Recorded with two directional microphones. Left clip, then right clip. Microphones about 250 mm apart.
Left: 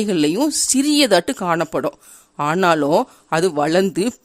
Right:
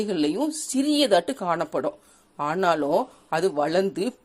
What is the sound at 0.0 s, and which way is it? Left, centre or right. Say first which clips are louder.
Speech: left 6 dB; left.